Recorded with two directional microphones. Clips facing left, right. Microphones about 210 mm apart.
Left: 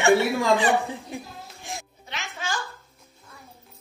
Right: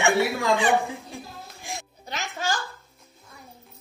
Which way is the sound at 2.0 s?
40° right (ahead or behind).